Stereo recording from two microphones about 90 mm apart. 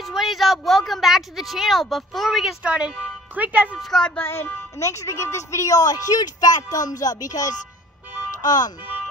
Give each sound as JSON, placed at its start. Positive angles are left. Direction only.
{"t": 0.0, "sound": "speech", "side_deg": 0}
{"t": 3.8, "sound": "a child's voice", "side_deg": 5}
{"t": 4.2, "sound": "speech", "side_deg": 25}